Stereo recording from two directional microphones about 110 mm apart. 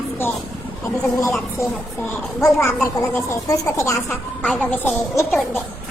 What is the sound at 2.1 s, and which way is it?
Speech, 20° left (ahead or behind).